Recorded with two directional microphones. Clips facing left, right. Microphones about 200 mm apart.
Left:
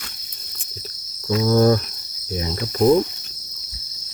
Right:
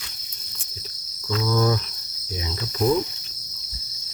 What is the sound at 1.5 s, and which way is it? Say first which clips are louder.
Cricket: left 7 dB; 45° left (ahead or behind).